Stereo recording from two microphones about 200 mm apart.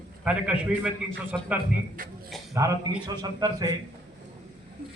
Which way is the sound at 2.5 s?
15° right (ahead or behind).